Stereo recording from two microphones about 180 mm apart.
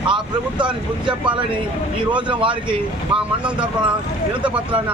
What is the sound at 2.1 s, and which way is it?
Speech, 25° right (ahead or behind).